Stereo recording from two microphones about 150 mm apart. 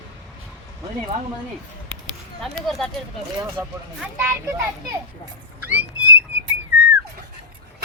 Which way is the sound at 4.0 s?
15° right (ahead or behind).